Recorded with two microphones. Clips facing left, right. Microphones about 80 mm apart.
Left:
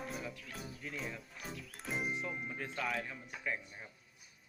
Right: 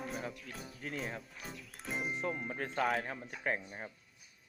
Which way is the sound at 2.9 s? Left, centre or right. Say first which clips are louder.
Right 4 dB; right.